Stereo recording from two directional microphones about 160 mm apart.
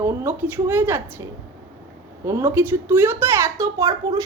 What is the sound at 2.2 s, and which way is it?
A child's voice, 15° right (ahead or behind).